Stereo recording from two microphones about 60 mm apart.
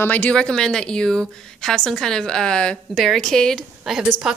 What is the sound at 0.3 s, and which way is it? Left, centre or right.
A woman's voice, centre.